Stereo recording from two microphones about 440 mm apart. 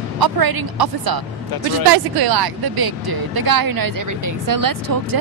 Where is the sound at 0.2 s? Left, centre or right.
Right.